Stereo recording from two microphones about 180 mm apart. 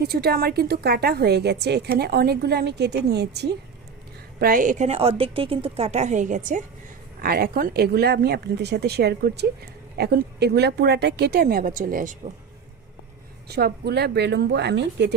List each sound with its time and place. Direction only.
0.0 s a woman's voice: 60° right (ahead or behind)
4.4 s a woman's voice: 50° right (ahead or behind)
7.2 s a woman's voice: 55° right (ahead or behind)
13.5 s speech: 60° right (ahead or behind)